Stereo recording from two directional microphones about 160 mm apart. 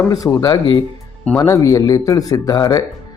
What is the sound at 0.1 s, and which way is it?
Speech, 20° left (ahead or behind).